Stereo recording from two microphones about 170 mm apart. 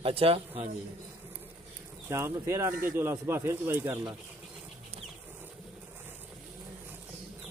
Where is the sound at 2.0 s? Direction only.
15° right (ahead or behind).